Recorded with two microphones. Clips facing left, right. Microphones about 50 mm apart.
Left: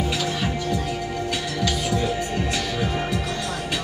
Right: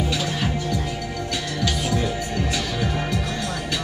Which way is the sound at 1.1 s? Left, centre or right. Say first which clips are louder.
Left 1 dB; centre.